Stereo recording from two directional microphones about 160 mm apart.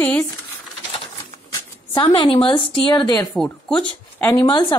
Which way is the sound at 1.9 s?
30° left (ahead or behind).